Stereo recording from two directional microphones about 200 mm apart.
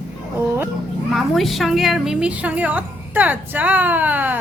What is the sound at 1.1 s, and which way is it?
A woman's voice, centre (ahead or behind).